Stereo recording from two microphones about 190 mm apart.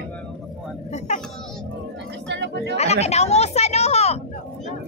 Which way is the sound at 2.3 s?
70° right (ahead or behind).